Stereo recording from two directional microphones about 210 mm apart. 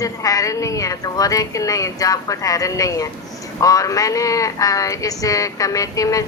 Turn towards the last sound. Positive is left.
turn(degrees=15)  # may be behind; listen again after turning